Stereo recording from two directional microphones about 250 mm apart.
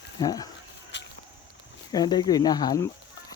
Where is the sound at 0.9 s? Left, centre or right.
Left.